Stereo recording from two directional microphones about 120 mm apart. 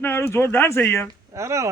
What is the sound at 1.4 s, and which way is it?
Speech, 25° right (ahead or behind).